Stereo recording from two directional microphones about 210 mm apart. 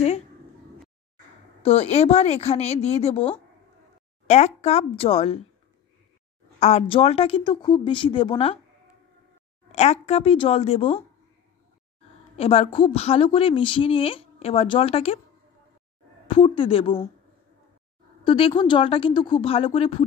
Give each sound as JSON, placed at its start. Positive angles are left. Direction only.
{"t": 1.6, "sound": "a woman's voice", "side_deg": 30}
{"t": 4.3, "sound": "a woman's voice", "side_deg": 30}
{"t": 6.6, "sound": "a woman's voice", "side_deg": 30}
{"t": 9.7, "sound": "a woman's voice", "side_deg": 30}
{"t": 12.4, "sound": "a woman's voice", "side_deg": 25}
{"t": 16.3, "sound": "a woman's voice", "side_deg": 25}
{"t": 18.2, "sound": "a woman's voice", "side_deg": 25}